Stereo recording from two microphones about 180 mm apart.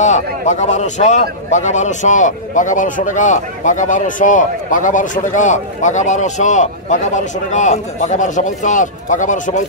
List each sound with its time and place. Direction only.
0.0 s a man's voice: 40° left (ahead or behind)